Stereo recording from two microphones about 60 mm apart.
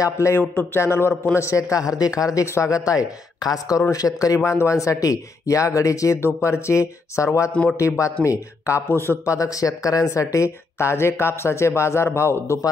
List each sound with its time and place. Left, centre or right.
0.0 s speech: left
0.7 s speech: left
1.3 s speech: left
3.9 s speech: left
4.5 s speech: left
7.6 s a man's voice: left
8.0 s speech: left
9.2 s speech: left